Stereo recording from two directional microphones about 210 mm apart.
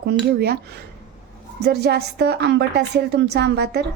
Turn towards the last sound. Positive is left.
turn(degrees=-50)  # may be behind; listen again after turning